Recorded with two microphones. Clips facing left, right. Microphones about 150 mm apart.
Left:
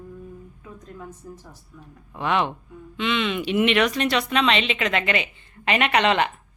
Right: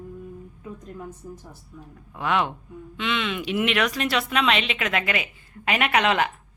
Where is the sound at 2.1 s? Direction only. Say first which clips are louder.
Left 1 dB; centre (ahead or behind).